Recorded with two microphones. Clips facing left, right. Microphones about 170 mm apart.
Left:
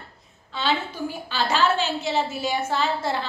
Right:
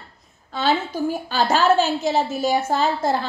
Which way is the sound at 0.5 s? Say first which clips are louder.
Right 4 dB; 45° right (ahead or behind).